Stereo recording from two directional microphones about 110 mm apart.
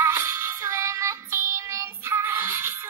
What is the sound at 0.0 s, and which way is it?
Music, 20° right (ahead or behind).